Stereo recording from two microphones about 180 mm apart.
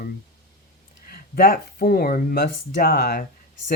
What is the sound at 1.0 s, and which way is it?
Speech, 55° left (ahead or behind).